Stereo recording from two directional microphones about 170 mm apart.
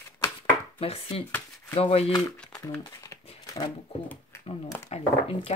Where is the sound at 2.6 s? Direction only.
20° left (ahead or behind).